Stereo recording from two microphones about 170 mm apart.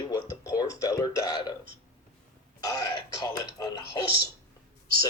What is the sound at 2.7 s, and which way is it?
Speech, 20° left (ahead or behind).